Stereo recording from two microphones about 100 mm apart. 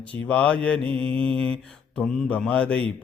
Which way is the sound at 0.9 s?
65° right (ahead or behind).